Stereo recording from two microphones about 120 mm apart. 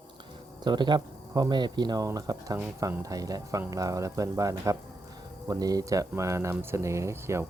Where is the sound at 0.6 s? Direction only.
40° right (ahead or behind).